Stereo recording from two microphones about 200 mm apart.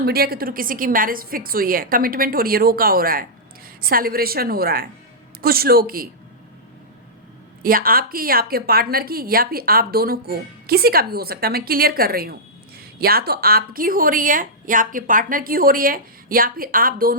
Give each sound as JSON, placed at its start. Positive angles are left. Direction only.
{"t": 0.0, "sound": "a woman's voice", "side_deg": -50}
{"t": 7.6, "sound": "a woman's voice", "side_deg": -45}